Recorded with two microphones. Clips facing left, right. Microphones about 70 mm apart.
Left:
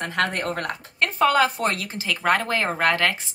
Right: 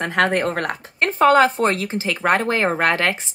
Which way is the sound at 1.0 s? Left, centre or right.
Right.